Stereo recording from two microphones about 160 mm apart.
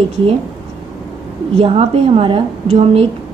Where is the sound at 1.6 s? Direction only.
35° right (ahead or behind).